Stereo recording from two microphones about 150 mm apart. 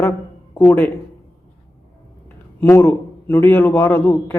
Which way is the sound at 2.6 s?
15° left (ahead or behind).